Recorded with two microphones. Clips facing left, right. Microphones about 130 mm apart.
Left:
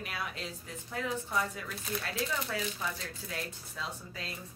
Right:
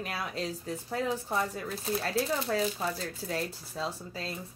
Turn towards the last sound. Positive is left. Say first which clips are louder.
# right 5 dB
turn(degrees=-35)  # may be behind; listen again after turning